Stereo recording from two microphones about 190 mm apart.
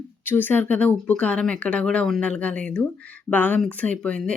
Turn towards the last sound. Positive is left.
turn(degrees=5)  # may be behind; listen again after turning